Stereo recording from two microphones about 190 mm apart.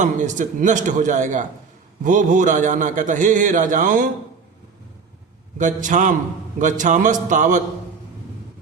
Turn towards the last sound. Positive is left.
turn(degrees=-40)  # may be behind; listen again after turning